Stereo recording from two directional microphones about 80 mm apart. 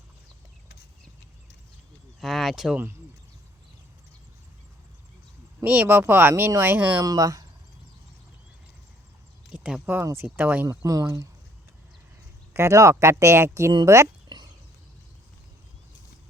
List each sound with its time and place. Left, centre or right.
2.2 s a sound: centre
5.6 s speech: right
7.0 s speech: right
9.5 s a sound: centre
10.0 s speech: right
10.2 s speech: centre
10.7 s speech: right
12.5 s speech: right
14.3 s a sound: right